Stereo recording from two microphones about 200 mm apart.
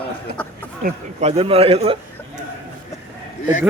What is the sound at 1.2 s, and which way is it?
A man's voice, 30° right (ahead or behind).